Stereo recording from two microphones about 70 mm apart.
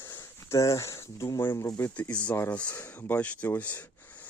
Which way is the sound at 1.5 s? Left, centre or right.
Left.